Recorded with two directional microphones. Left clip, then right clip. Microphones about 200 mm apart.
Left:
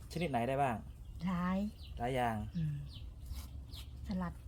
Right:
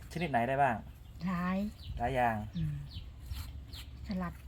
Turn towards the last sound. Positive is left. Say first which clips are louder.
# right 2 dB
turn(degrees=25)  # may be behind; listen again after turning